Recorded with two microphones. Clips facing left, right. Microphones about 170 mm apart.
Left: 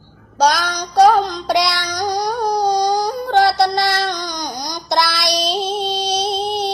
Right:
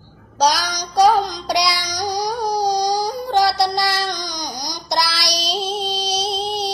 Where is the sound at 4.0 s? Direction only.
55° left (ahead or behind).